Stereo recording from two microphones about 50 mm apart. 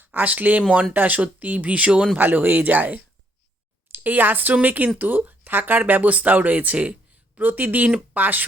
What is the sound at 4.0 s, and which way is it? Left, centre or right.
Speech, right.